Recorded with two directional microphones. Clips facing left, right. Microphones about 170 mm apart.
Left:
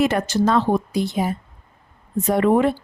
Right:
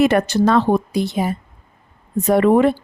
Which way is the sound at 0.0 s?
65° right (ahead or behind).